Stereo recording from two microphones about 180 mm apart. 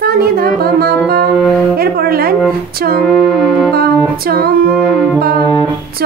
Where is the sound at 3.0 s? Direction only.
Centre (ahead or behind).